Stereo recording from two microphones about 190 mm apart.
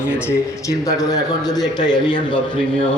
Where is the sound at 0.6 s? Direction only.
20° left (ahead or behind).